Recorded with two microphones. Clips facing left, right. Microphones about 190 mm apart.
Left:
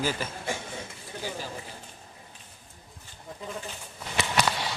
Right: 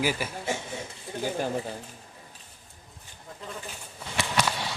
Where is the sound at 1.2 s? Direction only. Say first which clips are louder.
Right 7 dB; 55° right (ahead or behind).